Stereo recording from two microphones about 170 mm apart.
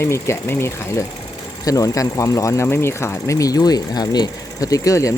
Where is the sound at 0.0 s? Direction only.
15° left (ahead or behind).